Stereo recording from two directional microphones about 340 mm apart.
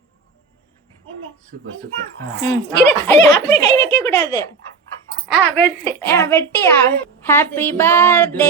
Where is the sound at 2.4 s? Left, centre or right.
Left.